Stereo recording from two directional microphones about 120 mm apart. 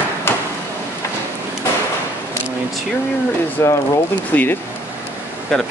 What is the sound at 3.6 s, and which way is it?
Speech, 25° left (ahead or behind).